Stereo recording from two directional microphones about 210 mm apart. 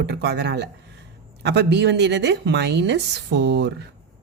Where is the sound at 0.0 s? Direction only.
50° right (ahead or behind).